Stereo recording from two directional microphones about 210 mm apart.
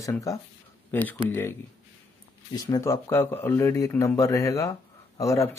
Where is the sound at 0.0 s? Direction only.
15° left (ahead or behind).